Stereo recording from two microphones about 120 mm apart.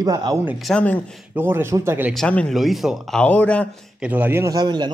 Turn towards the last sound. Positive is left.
turn(degrees=-40)  # may be behind; listen again after turning